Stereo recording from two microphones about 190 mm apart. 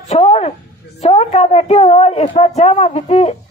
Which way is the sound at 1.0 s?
35° left (ahead or behind).